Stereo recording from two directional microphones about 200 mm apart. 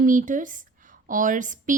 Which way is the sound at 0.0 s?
40° right (ahead or behind).